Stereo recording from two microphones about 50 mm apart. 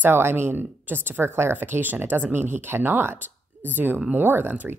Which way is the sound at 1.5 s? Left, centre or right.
Right.